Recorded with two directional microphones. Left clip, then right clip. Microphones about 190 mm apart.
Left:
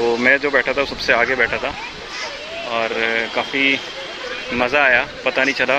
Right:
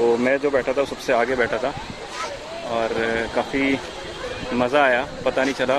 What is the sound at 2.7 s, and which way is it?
Speech, 15° right (ahead or behind).